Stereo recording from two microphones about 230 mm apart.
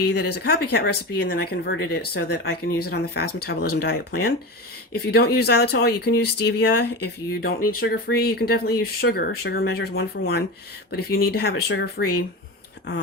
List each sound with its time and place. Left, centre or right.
0.0 s speech: left